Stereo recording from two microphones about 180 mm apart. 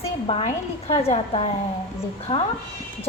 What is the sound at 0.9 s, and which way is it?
A woman's voice, 35° left (ahead or behind).